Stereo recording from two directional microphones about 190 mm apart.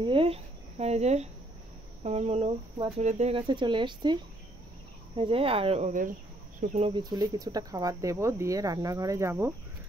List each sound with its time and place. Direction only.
0.0 s speech: 30° right (ahead or behind)
6.9 s speech: 20° right (ahead or behind)